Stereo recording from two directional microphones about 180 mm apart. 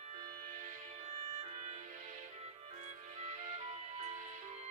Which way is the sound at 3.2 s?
40° right (ahead or behind).